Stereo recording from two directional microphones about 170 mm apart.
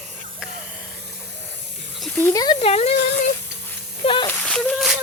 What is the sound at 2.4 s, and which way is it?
Speech, 35° left (ahead or behind).